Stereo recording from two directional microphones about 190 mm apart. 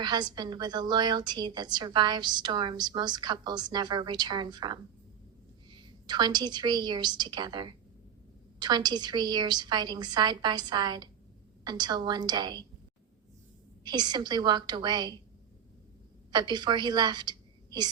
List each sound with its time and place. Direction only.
0.0 s a woman's voice: 20° right (ahead or behind)
13.8 s a woman's voice: 20° right (ahead or behind)
16.3 s a woman's voice: 20° right (ahead or behind)